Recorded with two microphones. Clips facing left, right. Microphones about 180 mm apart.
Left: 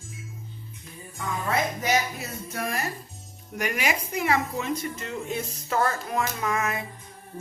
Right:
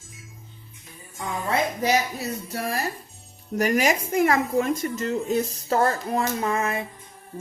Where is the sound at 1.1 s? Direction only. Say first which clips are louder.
Right 2 dB; 30° right (ahead or behind).